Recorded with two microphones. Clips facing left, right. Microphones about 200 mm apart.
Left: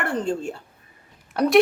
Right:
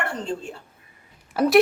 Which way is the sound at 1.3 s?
Centre (ahead or behind).